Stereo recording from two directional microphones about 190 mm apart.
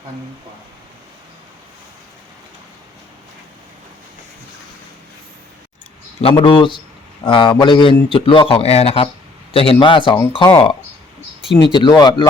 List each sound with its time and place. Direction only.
6.2 s a man's voice: 25° left (ahead or behind)